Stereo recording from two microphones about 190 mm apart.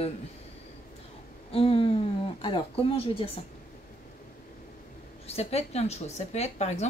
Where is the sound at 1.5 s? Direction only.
30° left (ahead or behind).